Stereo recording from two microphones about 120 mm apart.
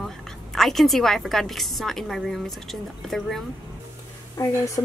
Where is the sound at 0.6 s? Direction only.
Centre (ahead or behind).